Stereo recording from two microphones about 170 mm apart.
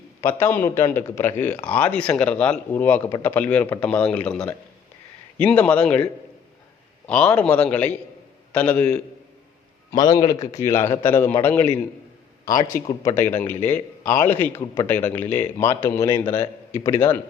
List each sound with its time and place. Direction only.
0.2 s a man's voice: 15° left (ahead or behind)
7.1 s a man's voice: 10° left (ahead or behind)
9.9 s a man's voice: 20° left (ahead or behind)